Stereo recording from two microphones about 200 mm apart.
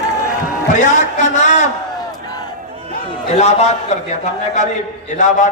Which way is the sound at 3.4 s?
35° left (ahead or behind).